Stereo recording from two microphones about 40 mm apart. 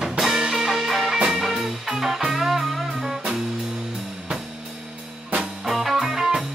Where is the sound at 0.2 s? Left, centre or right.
Centre.